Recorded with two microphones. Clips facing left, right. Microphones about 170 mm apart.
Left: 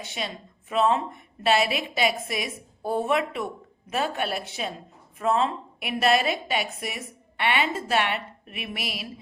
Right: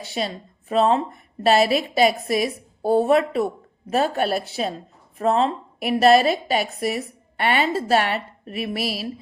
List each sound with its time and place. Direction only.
0.0 s a woman's voice: 35° right (ahead or behind)